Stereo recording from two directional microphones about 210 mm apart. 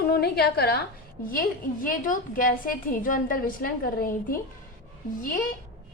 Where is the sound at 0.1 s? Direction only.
50° left (ahead or behind).